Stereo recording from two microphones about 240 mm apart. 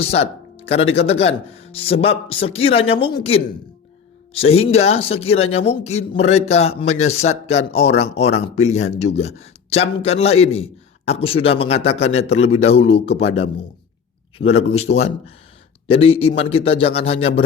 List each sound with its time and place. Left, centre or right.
0.0 s speech: left